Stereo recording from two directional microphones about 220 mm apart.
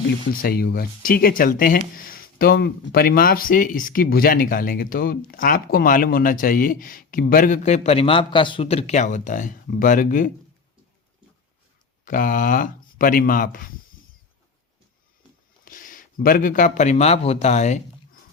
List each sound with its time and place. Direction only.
0.4 s speech: 40° left (ahead or behind)
12.0 s speech: 40° left (ahead or behind)
15.6 s a man's voice: 40° left (ahead or behind)